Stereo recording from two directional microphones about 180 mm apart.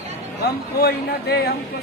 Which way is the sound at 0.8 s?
60° left (ahead or behind).